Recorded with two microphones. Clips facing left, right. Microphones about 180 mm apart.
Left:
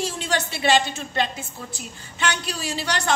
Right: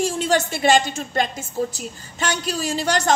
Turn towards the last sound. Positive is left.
turn(degrees=-45)  # may be behind; listen again after turning